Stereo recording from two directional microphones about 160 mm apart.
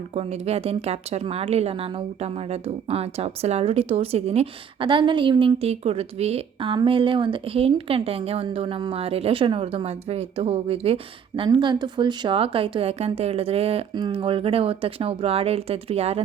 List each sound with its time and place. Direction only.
0.1 s a woman's voice: 40° right (ahead or behind)